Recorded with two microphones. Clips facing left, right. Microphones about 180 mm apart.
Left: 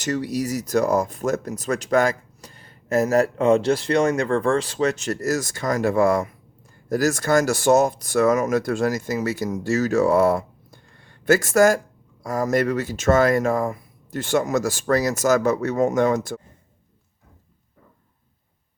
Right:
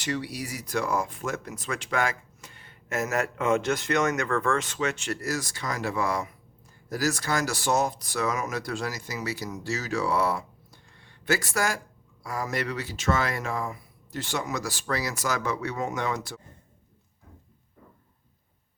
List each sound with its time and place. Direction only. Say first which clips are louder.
0.0 s speech: left 7 dB; 45° left (ahead or behind)